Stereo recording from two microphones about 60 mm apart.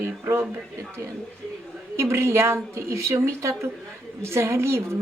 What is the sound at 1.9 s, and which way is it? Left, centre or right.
Speech, right.